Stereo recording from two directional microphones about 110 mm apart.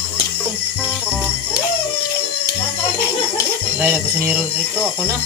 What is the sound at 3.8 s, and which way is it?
Speech, 15° right (ahead or behind).